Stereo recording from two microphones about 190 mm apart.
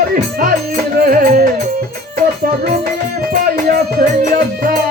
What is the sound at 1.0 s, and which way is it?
Music, 45° right (ahead or behind).